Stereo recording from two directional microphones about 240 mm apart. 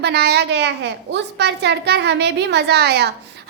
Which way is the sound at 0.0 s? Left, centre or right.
Right.